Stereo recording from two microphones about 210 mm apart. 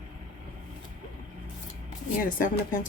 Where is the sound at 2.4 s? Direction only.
40° left (ahead or behind).